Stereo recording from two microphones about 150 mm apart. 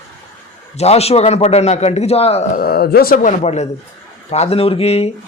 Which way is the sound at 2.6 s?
90° left.